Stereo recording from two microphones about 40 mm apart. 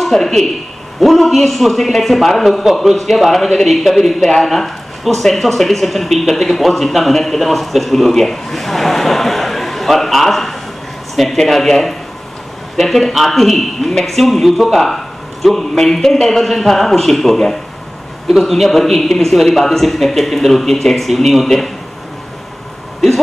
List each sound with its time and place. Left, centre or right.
0.0 s a man's voice: centre